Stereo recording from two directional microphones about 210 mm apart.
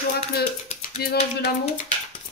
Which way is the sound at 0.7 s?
30° left (ahead or behind).